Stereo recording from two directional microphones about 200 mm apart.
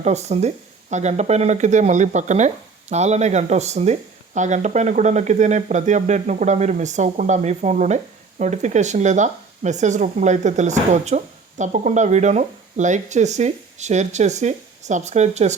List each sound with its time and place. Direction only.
0.0 s speech: 35° right (ahead or behind)